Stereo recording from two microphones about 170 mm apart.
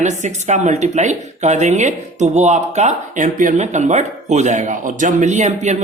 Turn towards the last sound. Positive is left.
turn(degrees=-45)  # may be behind; listen again after turning